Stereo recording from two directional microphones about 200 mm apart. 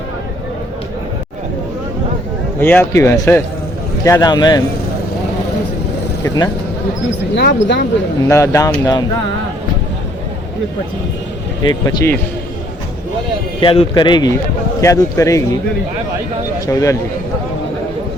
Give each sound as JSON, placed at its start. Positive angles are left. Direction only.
{"t": 2.6, "sound": "a man's voice", "side_deg": 10}
{"t": 7.3, "sound": "speech", "side_deg": 60}
{"t": 8.3, "sound": "a man's voice", "side_deg": 15}
{"t": 11.6, "sound": "speech", "side_deg": 20}
{"t": 13.6, "sound": "a man's voice", "side_deg": 25}
{"t": 16.6, "sound": "a man's voice", "side_deg": 15}